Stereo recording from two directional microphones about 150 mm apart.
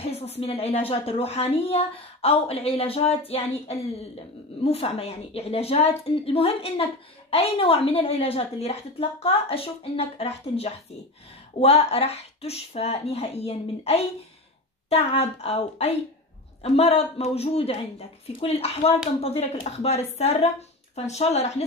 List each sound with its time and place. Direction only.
0.0 s a woman's voice: 45° left (ahead or behind)